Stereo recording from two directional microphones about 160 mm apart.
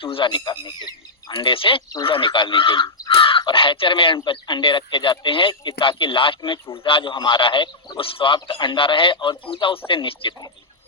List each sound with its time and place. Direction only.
0.0 s a man's voice: 35° left (ahead or behind)